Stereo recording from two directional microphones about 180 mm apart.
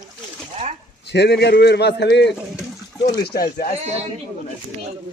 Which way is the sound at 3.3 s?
55° left (ahead or behind).